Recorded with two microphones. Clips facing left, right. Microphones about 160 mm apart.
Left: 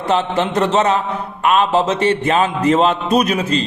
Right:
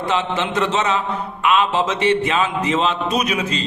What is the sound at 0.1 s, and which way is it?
A man's voice, 40° left (ahead or behind).